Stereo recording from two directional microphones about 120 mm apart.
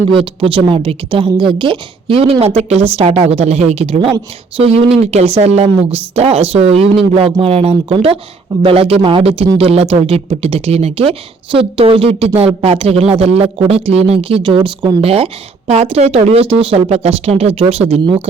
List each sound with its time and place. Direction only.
0.1 s a man's voice: 45° right (ahead or behind)